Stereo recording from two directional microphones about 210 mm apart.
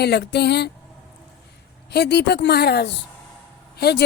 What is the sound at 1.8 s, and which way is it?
A woman's voice, 50° left (ahead or behind).